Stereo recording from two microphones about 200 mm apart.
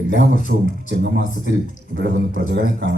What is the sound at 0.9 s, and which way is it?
Speech, 55° right (ahead or behind).